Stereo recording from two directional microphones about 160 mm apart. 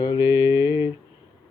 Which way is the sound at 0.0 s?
30° left (ahead or behind).